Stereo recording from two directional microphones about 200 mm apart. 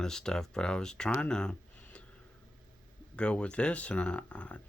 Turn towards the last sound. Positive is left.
turn(degrees=5)  # may be behind; listen again after turning